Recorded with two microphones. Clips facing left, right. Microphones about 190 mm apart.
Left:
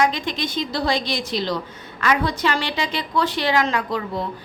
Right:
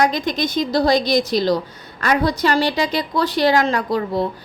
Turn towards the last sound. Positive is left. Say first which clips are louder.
# right 4 dB
turn(degrees=-40)  # may be behind; listen again after turning